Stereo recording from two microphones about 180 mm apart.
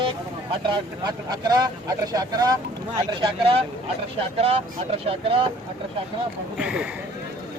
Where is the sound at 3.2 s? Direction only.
30° right (ahead or behind).